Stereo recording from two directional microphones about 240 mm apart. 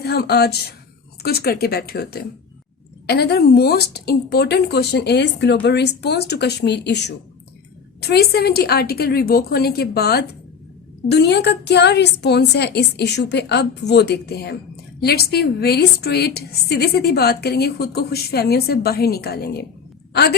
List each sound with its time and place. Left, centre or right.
0.0 s a woman's voice: left